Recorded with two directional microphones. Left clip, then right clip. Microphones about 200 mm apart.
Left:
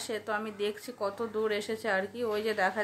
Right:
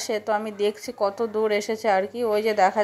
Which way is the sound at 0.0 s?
20° right (ahead or behind).